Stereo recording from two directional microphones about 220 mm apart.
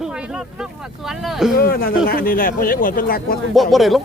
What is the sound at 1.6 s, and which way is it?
Speech, 40° left (ahead or behind).